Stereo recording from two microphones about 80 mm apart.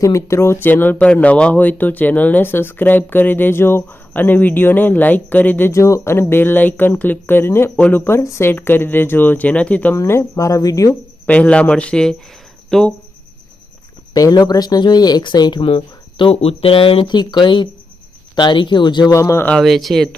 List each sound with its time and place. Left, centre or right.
0.0 s speech: left
5.7 s speech: left; by 9.9 s centre
9.9 s speech: left
11.3 s speech: centre
14.1 s speech: left
16.7 s speech: left
19.1 s speech: left
19.5 s speech: centre